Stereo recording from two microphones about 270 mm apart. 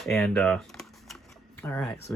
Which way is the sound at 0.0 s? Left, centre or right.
Centre.